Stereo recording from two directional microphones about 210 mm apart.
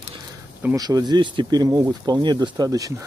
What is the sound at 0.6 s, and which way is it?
Speech, 15° right (ahead or behind).